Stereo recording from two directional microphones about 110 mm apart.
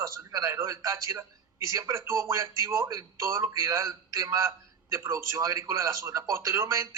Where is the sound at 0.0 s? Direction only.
30° right (ahead or behind).